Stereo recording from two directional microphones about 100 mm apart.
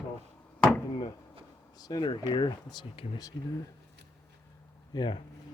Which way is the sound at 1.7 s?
40° left (ahead or behind).